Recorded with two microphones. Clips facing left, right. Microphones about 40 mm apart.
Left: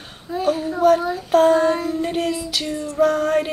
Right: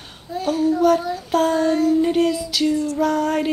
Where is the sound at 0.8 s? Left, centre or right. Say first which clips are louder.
Left 1 dB; left.